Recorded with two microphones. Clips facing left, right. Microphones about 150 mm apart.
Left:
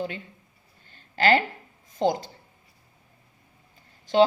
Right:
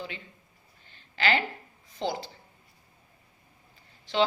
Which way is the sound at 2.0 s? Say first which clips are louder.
Left 7 dB; 45° left (ahead or behind).